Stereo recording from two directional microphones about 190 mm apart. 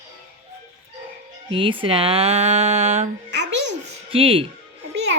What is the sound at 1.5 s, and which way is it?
A woman's voice, 25° right (ahead or behind).